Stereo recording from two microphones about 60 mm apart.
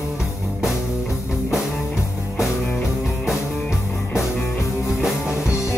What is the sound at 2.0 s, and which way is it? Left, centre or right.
Music, left.